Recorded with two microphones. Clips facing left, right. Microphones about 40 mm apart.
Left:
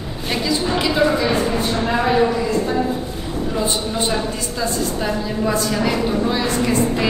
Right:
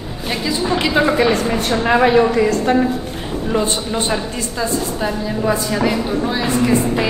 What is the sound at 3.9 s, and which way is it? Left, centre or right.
A woman's voice, centre.